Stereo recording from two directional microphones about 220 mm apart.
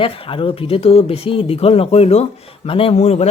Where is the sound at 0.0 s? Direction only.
25° left (ahead or behind).